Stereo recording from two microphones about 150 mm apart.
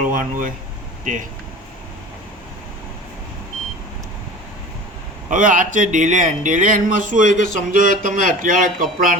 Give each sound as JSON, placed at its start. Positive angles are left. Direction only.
{"t": 0.0, "sound": "speech", "side_deg": -65}
{"t": 5.3, "sound": "speech", "side_deg": -60}